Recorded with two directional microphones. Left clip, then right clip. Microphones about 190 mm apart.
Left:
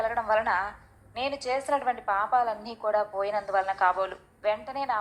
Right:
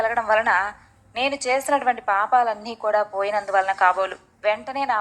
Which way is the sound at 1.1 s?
30° right (ahead or behind).